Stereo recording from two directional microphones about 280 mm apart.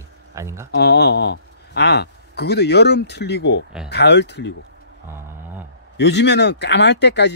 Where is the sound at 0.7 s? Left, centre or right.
Left.